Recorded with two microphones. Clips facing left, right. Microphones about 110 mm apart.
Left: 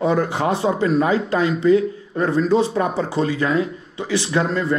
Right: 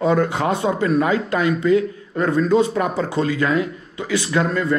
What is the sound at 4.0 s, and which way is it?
Speech, 30° left (ahead or behind).